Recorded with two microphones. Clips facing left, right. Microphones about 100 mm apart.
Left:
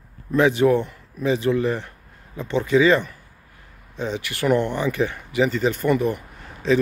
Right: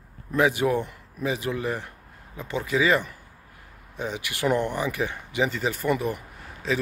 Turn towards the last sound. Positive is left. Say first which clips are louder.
# left 7 dB
turn(degrees=-5)  # may be behind; listen again after turning